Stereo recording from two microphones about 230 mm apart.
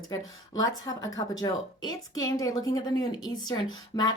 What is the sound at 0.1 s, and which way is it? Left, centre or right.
Speech, centre.